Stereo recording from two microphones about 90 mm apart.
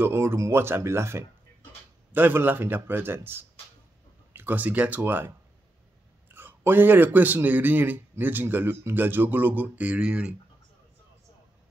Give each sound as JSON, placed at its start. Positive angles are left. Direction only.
{"t": 0.0, "sound": "a man's voice", "side_deg": -30}
{"t": 6.3, "sound": "a man's voice", "side_deg": -20}